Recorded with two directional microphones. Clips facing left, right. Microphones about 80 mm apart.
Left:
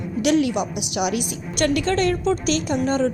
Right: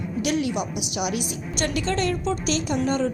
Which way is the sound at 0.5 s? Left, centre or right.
Left.